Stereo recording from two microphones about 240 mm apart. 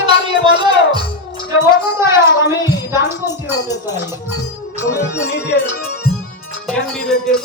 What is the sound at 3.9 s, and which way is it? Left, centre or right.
Music, centre.